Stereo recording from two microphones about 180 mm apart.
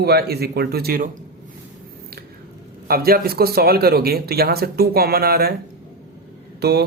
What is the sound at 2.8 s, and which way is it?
A man's voice, 55° right (ahead or behind).